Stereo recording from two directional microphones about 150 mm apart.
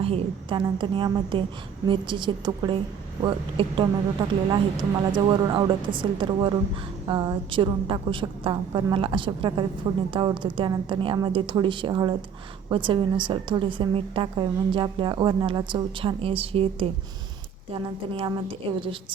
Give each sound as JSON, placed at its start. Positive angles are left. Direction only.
{"t": 0.0, "sound": "a woman's voice", "side_deg": -35}
{"t": 18.1, "sound": "a woman's voice", "side_deg": -35}